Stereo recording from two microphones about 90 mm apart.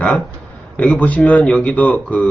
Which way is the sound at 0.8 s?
15° left (ahead or behind).